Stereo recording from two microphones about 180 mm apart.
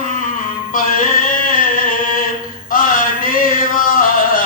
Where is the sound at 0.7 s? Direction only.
50° left (ahead or behind).